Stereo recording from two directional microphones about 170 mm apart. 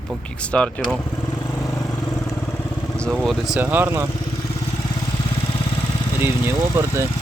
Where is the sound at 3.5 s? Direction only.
10° right (ahead or behind).